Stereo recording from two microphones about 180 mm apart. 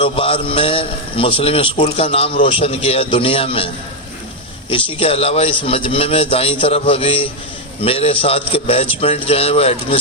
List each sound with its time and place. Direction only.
0.0 s a man's voice: 30° left (ahead or behind)
4.7 s a man's voice: 30° left (ahead or behind)